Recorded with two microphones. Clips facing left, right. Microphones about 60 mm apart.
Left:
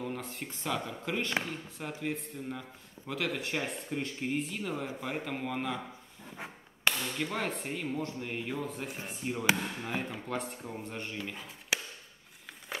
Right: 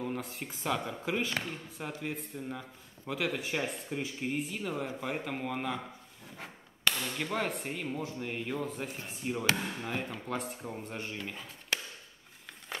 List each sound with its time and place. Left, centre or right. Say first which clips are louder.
0.0 s speech: right 1 dB; centre
6.3 s a sound: left 3 dB; centre
7.0 s speech: right 1 dB; centre